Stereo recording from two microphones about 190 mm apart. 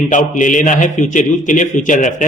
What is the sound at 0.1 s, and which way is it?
A man's voice, 40° left (ahead or behind).